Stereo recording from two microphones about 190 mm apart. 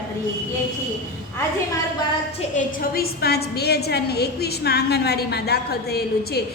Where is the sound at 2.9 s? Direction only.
55° left (ahead or behind).